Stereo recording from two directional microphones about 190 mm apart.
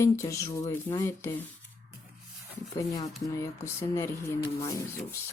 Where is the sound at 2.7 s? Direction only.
20° left (ahead or behind).